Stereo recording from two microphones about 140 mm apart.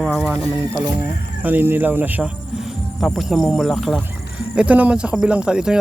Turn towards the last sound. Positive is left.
turn(degrees=-5)  # may be behind; listen again after turning